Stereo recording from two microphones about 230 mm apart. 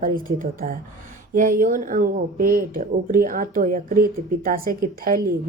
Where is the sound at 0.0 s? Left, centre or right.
Right.